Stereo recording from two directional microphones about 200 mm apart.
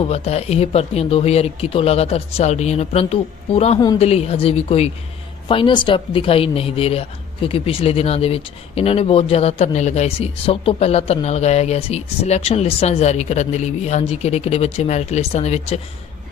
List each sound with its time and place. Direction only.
0.1 s speech: 30° left (ahead or behind)
3.8 s a woman's voice: 20° left (ahead or behind)
4.0 s a woman's voice: 30° left (ahead or behind)